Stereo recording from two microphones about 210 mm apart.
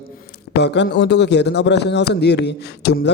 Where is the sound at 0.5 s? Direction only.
55° left (ahead or behind).